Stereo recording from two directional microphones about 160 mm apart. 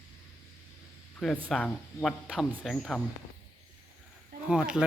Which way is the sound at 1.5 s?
5° left (ahead or behind).